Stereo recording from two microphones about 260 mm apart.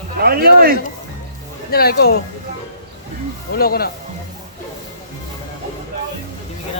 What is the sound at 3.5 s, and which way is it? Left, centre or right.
Speech, left.